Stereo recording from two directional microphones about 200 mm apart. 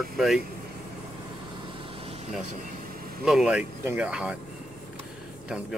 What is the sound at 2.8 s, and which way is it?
Vehicle, 45° right (ahead or behind).